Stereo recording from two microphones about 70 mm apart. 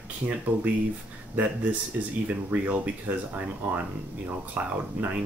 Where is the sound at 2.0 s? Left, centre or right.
Right.